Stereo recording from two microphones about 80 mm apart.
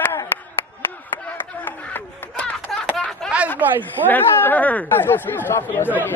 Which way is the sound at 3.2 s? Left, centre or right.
Centre.